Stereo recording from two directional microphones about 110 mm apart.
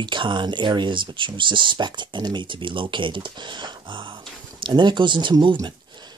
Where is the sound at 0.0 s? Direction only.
45° right (ahead or behind).